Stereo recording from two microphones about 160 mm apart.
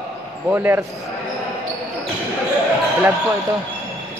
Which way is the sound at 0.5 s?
15° right (ahead or behind).